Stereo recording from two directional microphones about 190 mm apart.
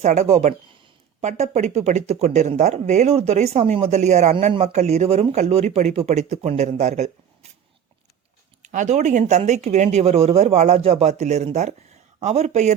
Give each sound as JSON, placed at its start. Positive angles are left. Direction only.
{"t": 0.0, "sound": "speech", "side_deg": -35}
{"t": 8.6, "sound": "speech", "side_deg": -40}